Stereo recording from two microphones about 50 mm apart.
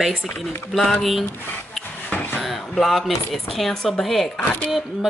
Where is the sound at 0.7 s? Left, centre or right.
Centre.